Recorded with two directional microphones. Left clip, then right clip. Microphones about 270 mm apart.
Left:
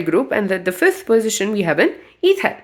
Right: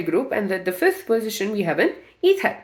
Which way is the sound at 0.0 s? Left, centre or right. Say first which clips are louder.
Left 5 dB; left.